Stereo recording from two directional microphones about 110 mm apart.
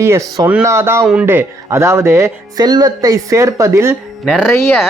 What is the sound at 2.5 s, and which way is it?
Speech, 35° right (ahead or behind).